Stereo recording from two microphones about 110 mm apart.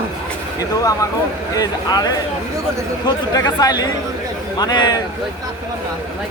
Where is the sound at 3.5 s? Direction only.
40° left (ahead or behind).